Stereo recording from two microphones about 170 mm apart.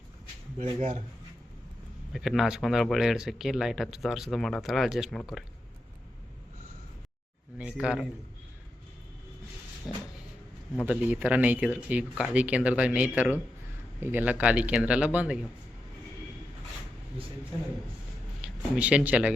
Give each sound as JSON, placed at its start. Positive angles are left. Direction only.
{"t": 0.6, "sound": "speech", "side_deg": -40}
{"t": 2.1, "sound": "speech", "side_deg": 0}
{"t": 7.6, "sound": "speech", "side_deg": -5}
{"t": 10.8, "sound": "speech", "side_deg": -10}
{"t": 18.4, "sound": "speech", "side_deg": -5}